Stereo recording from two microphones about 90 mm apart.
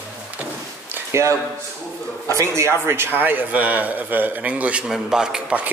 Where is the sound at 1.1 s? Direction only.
35° right (ahead or behind); by 5.7 s 10° right (ahead or behind).